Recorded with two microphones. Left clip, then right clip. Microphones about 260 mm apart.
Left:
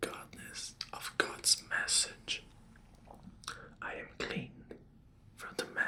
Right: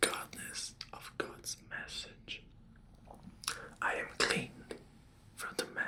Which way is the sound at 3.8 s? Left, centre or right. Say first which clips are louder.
Right 9 dB; right.